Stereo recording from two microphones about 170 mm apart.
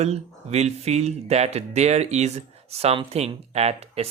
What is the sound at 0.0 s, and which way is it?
Speech, 40° right (ahead or behind).